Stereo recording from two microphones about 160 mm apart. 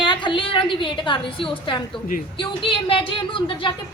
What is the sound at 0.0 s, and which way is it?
A woman's voice, 30° left (ahead or behind).